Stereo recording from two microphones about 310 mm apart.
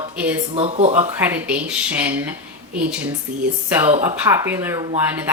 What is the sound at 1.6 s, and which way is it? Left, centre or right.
Speech, centre.